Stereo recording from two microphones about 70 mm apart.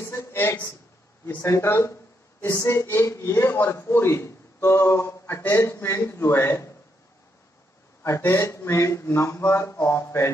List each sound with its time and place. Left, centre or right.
0.0 s a sound: left
1.4 s speech: left
8.3 s speech: left